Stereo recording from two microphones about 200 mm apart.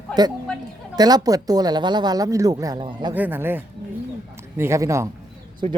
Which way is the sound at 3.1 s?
10° right (ahead or behind).